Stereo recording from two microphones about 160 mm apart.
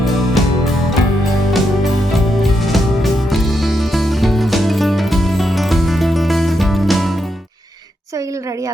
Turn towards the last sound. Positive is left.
turn(degrees=0)  # may be behind; listen again after turning